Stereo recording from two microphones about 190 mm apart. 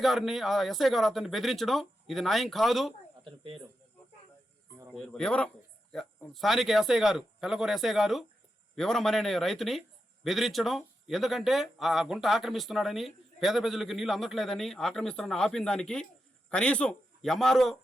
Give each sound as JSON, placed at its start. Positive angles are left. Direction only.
{"t": 0.0, "sound": "speech", "side_deg": 0}
{"t": 3.2, "sound": "speech", "side_deg": -30}
{"t": 4.9, "sound": "speech", "side_deg": 5}